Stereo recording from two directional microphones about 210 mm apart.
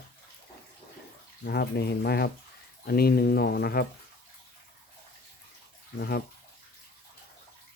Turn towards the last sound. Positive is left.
turn(degrees=50)  # may be behind; listen again after turning